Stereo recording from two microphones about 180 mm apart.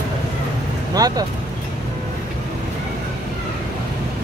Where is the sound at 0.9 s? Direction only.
20° right (ahead or behind).